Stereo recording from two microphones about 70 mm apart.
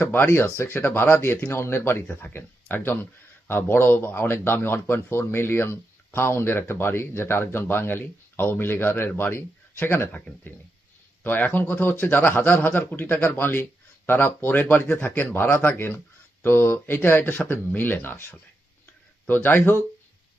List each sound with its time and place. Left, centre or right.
0.0 s speech: left